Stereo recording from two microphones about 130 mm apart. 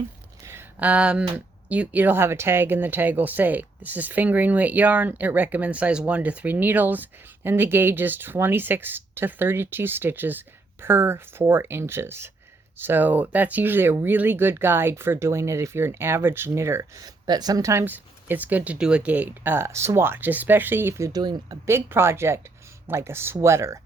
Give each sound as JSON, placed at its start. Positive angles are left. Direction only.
{"t": 0.4, "sound": "a sound", "side_deg": -15}
{"t": 1.7, "sound": "speech", "side_deg": -10}
{"t": 21.7, "sound": "speech", "side_deg": -20}